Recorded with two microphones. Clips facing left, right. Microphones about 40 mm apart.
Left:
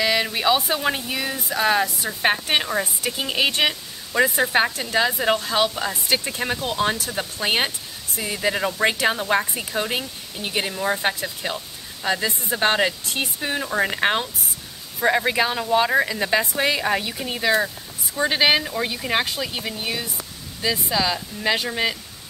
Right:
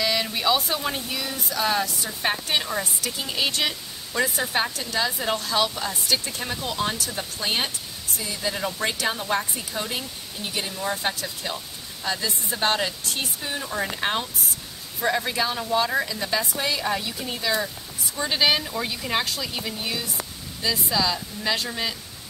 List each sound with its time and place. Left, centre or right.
0.0 s speech: centre; by 8.6 s left
8.6 s speech: left